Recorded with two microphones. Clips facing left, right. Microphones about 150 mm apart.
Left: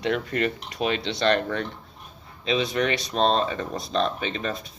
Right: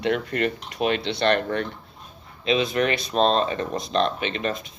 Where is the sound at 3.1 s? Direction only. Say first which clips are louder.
Right 2 dB; 35° right (ahead or behind).